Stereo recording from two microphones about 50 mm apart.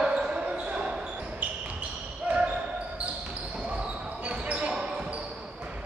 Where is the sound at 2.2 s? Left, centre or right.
Right.